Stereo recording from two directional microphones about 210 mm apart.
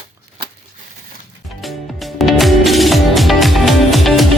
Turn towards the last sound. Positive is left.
turn(degrees=0)  # may be behind; listen again after turning